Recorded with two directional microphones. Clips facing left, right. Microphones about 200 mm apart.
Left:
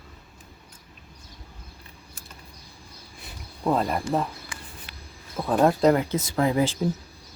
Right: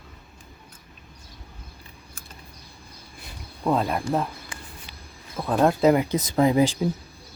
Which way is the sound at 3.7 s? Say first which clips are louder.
Right 1 dB; centre (ahead or behind).